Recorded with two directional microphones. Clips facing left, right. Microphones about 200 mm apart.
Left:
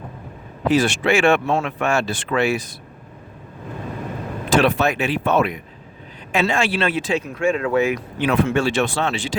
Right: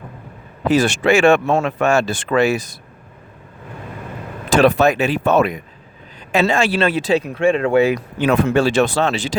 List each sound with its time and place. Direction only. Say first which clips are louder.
0.7 s speech: right 3 dB; 45° right (ahead or behind)
4.4 s speech: right 4 dB; 45° right (ahead or behind)